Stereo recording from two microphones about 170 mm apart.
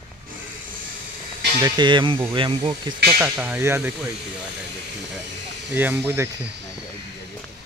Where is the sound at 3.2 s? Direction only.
10° right (ahead or behind).